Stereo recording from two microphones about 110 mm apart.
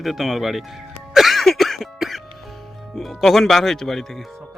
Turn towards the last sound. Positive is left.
turn(degrees=5)  # may be behind; listen again after turning